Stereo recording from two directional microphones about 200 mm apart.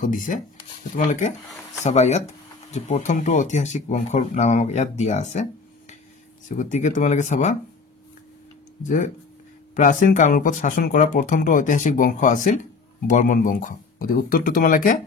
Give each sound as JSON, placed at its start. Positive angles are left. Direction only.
{"t": 0.0, "sound": "speech", "side_deg": 40}
{"t": 6.5, "sound": "speech", "side_deg": 35}
{"t": 8.8, "sound": "speech", "side_deg": 40}